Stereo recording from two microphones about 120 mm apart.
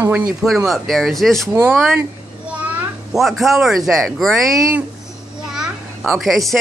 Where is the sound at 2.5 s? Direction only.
10° right (ahead or behind).